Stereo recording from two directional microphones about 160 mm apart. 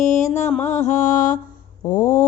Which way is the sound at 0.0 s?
50° left (ahead or behind).